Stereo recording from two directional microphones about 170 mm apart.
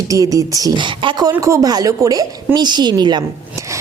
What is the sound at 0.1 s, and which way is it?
A woman's voice, 20° right (ahead or behind).